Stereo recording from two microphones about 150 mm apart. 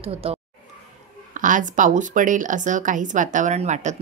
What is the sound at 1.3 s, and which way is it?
Speech, 60° right (ahead or behind).